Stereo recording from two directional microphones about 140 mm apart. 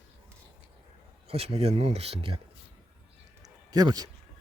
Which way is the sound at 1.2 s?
45° right (ahead or behind).